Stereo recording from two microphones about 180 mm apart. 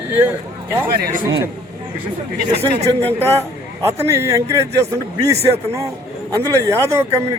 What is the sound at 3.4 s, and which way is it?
A man's voice, 15° right (ahead or behind).